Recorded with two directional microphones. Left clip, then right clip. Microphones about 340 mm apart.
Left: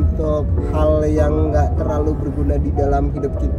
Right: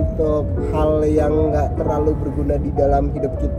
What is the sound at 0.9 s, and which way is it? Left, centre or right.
Speech, centre.